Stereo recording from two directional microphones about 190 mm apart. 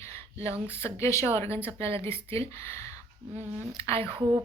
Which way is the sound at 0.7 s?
15° left (ahead or behind).